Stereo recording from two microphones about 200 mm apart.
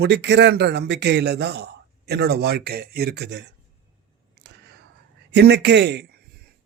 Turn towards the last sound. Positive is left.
turn(degrees=-55)  # may be behind; listen again after turning